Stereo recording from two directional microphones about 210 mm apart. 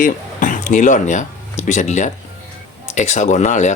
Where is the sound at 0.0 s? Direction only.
40° left (ahead or behind).